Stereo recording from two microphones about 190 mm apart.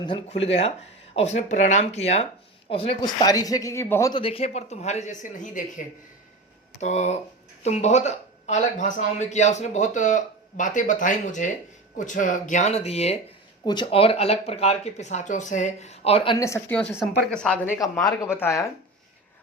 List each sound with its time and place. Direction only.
0.0 s a man's voice: 30° left (ahead or behind)
4.2 s a man's voice: 30° left (ahead or behind)
16.4 s a woman's voice: 10° left (ahead or behind)